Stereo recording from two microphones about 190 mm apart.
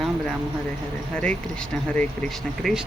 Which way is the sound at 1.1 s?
5° left (ahead or behind).